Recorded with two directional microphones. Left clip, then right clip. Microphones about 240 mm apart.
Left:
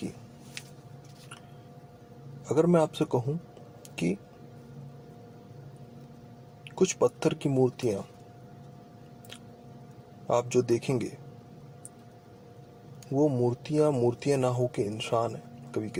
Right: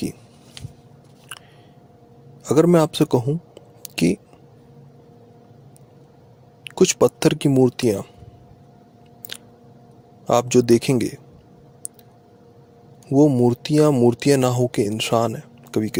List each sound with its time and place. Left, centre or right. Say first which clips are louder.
2.4 s speech: right 8 dB; right
3.8 s a sound: right 11 dB; right
6.7 s speech: right 9 dB; right
9.3 s chewing: right 12 dB; right
10.2 s speech: right 9 dB; right
13.1 s speech: right 10 dB; right